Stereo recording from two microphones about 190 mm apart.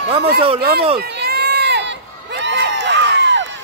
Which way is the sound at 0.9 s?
60° right (ahead or behind).